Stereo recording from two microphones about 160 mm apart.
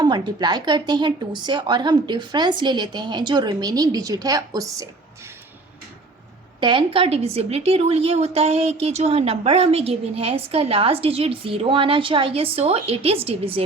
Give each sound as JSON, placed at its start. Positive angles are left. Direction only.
{"t": 0.0, "sound": "a woman's voice", "side_deg": -25}
{"t": 6.6, "sound": "a woman's voice", "side_deg": -30}